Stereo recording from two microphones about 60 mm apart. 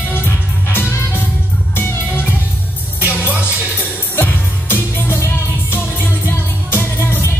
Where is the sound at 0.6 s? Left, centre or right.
Left.